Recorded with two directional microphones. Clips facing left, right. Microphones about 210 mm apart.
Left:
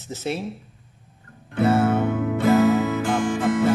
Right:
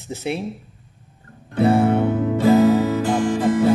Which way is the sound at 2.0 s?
35° right (ahead or behind).